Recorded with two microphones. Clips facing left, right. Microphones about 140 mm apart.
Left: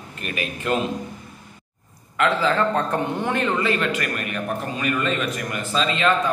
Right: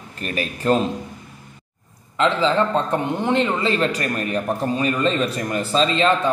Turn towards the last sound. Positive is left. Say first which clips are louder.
# right 4 dB
turn(degrees=-30)  # may be behind; listen again after turning